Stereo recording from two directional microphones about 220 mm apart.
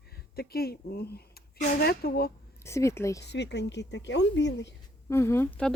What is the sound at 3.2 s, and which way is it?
A woman's voice, 50° left (ahead or behind).